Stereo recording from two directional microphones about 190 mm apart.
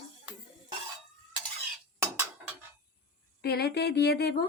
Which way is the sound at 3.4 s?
55° left (ahead or behind).